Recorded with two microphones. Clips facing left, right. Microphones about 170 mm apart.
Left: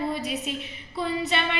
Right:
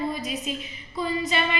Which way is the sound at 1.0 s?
65° left (ahead or behind).